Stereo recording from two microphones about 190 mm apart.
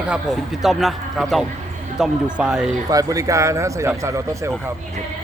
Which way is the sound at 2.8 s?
20° right (ahead or behind).